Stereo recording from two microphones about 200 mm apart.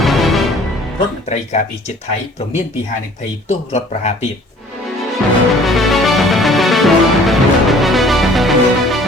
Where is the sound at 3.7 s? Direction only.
35° left (ahead or behind).